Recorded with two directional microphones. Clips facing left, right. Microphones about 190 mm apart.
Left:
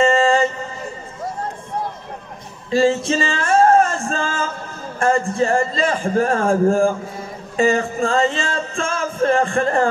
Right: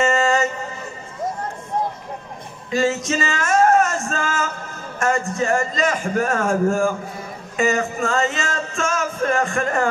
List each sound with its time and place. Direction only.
0.0 s mantra: 30° left (ahead or behind)
2.7 s music: 30° left (ahead or behind)
4.9 s speech: 30° left (ahead or behind)
7.5 s music: 30° left (ahead or behind)